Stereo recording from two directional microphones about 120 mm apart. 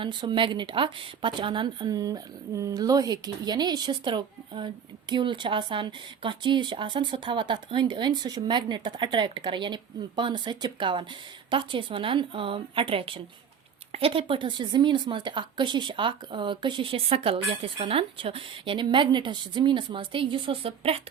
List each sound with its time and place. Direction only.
0.0 s a woman's voice: 40° right (ahead or behind)